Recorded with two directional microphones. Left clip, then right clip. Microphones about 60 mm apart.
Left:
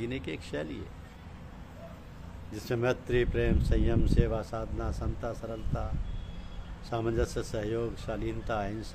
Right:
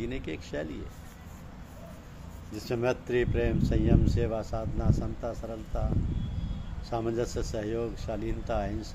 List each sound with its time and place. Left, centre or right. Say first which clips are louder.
0.0 s speech: even; left
2.5 s speech: right 1 dB; left
6.9 s speech: even; left